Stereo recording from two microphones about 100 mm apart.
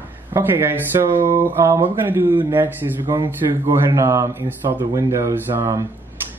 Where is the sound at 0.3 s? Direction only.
25° right (ahead or behind).